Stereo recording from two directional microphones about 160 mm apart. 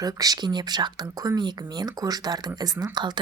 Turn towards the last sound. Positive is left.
turn(degrees=-30)  # may be behind; listen again after turning